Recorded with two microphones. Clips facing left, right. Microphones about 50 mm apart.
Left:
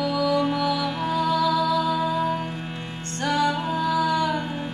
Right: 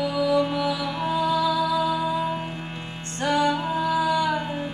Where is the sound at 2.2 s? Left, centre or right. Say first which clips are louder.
Left 2 dB; centre.